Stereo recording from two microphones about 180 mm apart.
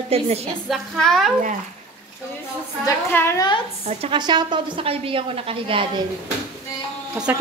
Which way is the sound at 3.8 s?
30° right (ahead or behind).